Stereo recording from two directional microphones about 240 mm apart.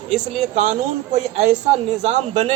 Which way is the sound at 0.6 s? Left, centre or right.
Right.